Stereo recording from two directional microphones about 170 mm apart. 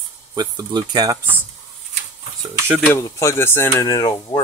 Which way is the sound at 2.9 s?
15° left (ahead or behind).